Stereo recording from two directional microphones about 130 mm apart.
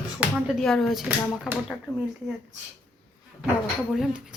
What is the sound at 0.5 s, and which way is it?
Speech, 5° left (ahead or behind).